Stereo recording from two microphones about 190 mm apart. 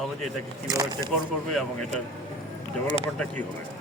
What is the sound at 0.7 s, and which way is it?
Speech, 20° right (ahead or behind).